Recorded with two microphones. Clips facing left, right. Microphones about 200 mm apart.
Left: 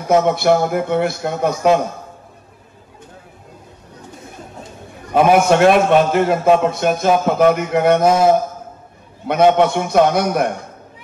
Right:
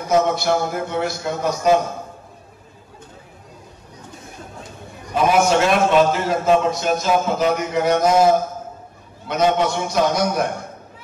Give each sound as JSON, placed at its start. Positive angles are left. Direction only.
{"t": 0.1, "sound": "a man's voice", "side_deg": 60}
{"t": 5.1, "sound": "a man's voice", "side_deg": 55}
{"t": 9.3, "sound": "a man's voice", "side_deg": 55}